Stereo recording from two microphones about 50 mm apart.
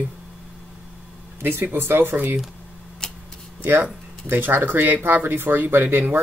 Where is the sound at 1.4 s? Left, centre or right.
Right.